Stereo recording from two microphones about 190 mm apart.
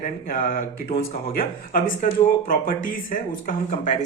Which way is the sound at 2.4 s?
45° left (ahead or behind).